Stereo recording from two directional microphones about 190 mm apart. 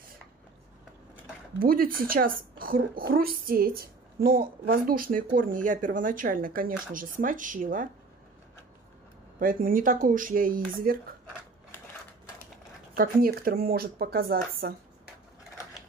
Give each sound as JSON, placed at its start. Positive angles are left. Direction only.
{"t": 1.6, "sound": "a woman's voice", "side_deg": -50}
{"t": 9.4, "sound": "a woman's voice", "side_deg": -45}
{"t": 12.9, "sound": "a woman's voice", "side_deg": -50}